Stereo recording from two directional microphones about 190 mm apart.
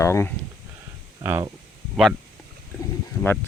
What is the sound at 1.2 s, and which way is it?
Speech, 15° right (ahead or behind).